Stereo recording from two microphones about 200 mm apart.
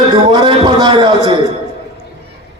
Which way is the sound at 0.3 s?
25° right (ahead or behind).